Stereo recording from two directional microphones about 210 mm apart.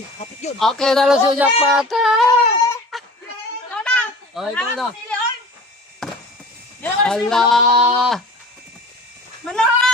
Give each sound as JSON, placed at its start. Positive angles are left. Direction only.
{"t": 0.2, "sound": "speech", "side_deg": 30}
{"t": 0.6, "sound": "speech", "side_deg": 0}
{"t": 2.2, "sound": "a sound", "side_deg": 15}
{"t": 6.0, "sound": "a sound", "side_deg": 0}
{"t": 6.8, "sound": "speech", "side_deg": 5}
{"t": 9.5, "sound": "speech", "side_deg": 5}